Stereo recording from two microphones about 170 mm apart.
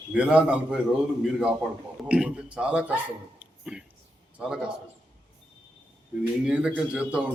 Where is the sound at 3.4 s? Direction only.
5° right (ahead or behind).